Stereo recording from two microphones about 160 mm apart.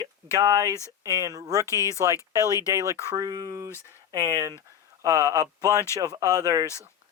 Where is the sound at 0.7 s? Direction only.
20° left (ahead or behind).